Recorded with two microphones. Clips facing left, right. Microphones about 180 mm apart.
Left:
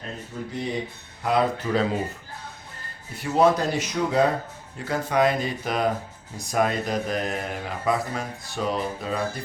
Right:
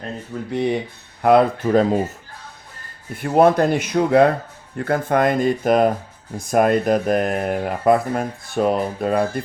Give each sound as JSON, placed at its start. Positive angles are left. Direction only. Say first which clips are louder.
{"t": 0.5, "sound": "speech", "louder": "right 9 dB", "side_deg": -65}
{"t": 3.2, "sound": "speech", "louder": "right 5 dB", "side_deg": -55}